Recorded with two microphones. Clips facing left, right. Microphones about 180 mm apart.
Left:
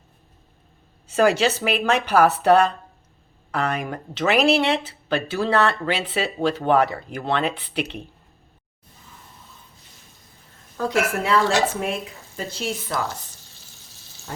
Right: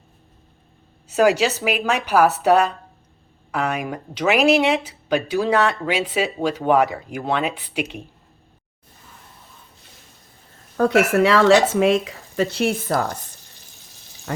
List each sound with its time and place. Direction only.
1.1 s speech: 10° right (ahead or behind)
10.8 s speech: 60° right (ahead or behind)
14.3 s speech: 90° right